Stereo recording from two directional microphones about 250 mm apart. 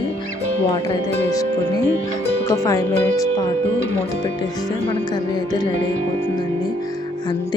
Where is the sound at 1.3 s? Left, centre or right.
Centre.